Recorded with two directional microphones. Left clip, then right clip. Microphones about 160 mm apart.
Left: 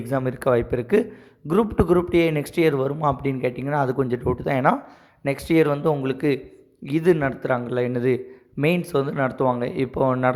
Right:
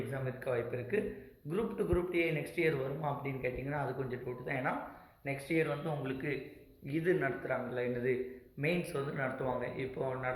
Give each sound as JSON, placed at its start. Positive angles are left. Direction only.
{"t": 0.1, "sound": "a man's voice", "side_deg": 45}